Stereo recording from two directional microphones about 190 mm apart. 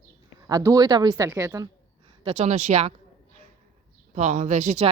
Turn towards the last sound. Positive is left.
turn(degrees=-35)  # may be behind; listen again after turning